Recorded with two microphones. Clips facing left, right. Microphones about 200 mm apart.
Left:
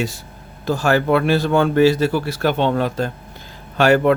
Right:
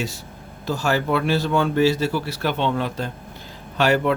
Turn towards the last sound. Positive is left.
turn(degrees=50)  # may be behind; listen again after turning